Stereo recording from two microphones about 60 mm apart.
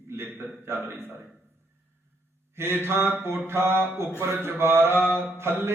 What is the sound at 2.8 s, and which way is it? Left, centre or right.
A man's voice, right.